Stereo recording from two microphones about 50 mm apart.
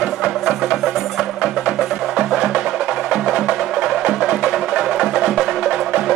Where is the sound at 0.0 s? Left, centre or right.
Centre.